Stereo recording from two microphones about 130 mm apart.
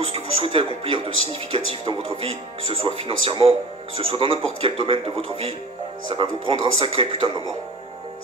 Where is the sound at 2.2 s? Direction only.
45° right (ahead or behind).